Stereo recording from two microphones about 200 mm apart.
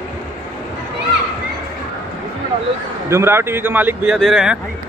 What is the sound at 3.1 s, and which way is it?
Speech, 10° right (ahead or behind).